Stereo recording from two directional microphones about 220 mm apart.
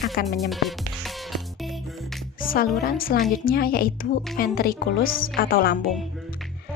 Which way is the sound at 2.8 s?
40° left (ahead or behind).